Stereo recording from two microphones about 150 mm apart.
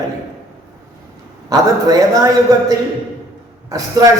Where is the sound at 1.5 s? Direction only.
25° right (ahead or behind).